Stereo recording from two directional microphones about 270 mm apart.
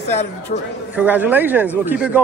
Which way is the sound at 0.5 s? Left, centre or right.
Left.